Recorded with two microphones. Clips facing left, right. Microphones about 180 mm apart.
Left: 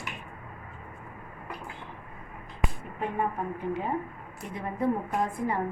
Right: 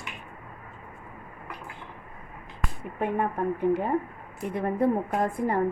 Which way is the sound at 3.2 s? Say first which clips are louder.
Right 3 dB; 60° right (ahead or behind).